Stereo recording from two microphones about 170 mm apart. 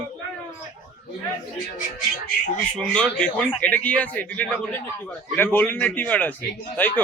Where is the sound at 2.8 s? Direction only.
5° left (ahead or behind).